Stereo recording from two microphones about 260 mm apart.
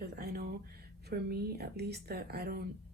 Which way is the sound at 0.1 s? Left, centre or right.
Right.